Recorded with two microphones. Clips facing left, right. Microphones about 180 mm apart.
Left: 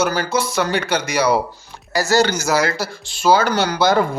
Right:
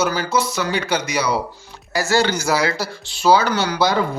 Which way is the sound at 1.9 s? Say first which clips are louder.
Left 2 dB; 40° left (ahead or behind).